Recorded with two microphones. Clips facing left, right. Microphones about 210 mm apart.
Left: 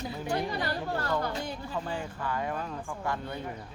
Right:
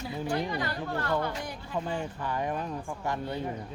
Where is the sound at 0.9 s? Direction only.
35° left (ahead or behind).